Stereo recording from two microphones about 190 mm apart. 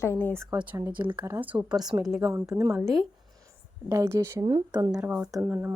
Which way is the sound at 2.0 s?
Centre (ahead or behind).